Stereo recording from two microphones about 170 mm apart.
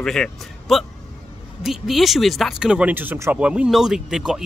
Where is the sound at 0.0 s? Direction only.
5° left (ahead or behind).